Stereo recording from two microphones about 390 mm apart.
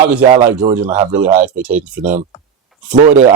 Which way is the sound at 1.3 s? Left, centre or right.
Centre.